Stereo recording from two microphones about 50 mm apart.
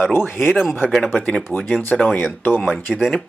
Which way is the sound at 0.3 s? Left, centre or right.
Centre.